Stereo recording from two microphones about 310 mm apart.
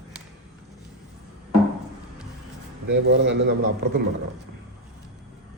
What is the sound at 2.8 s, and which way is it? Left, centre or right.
A man's voice, right.